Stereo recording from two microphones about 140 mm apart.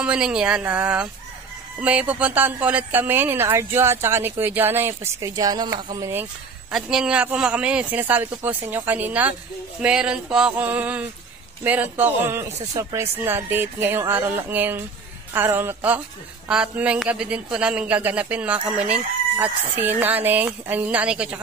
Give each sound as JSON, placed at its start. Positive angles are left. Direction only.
{"t": 0.0, "sound": "a woman's voice", "side_deg": -5}
{"t": 6.7, "sound": "a woman's voice", "side_deg": -5}